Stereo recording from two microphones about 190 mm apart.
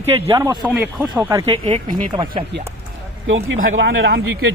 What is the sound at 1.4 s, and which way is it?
A man's voice, 30° right (ahead or behind).